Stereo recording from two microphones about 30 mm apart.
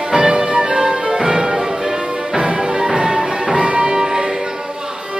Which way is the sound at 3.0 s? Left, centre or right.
Right.